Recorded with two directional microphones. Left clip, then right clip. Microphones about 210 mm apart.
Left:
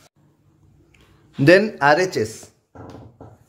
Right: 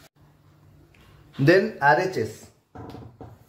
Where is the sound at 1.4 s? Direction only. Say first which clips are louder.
Left 5 dB; 40° left (ahead or behind).